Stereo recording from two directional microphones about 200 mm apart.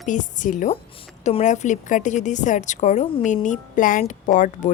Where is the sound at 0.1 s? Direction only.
40° left (ahead or behind).